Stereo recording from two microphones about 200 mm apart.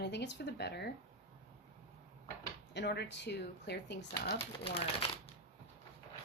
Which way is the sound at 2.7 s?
55° left (ahead or behind).